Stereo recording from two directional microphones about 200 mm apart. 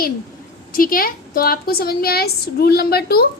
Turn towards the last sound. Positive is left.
turn(degrees=50)  # may be behind; listen again after turning